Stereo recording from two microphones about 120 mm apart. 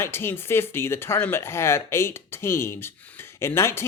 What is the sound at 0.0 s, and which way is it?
Speech, 20° left (ahead or behind).